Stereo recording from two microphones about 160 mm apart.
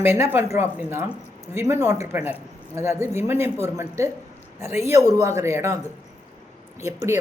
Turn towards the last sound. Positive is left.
turn(degrees=-20)  # may be behind; listen again after turning